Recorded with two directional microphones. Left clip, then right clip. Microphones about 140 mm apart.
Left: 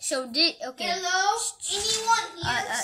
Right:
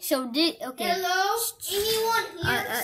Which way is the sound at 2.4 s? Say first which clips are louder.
Right 1 dB; centre (ahead or behind).